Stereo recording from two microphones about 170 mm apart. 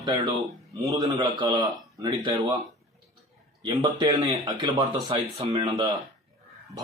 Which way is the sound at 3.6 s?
25° right (ahead or behind).